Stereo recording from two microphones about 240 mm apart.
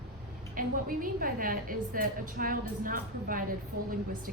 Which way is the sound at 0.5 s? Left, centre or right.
Right.